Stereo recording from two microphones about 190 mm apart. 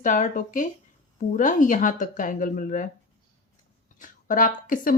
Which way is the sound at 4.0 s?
45° left (ahead or behind).